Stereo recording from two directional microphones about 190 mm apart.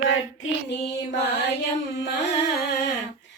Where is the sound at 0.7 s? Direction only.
65° left (ahead or behind).